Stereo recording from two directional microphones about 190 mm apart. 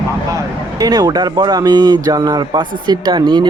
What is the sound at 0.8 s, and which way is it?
Speech, 20° right (ahead or behind).